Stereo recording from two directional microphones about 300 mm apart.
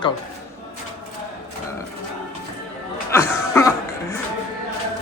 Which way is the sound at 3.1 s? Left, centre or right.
Centre.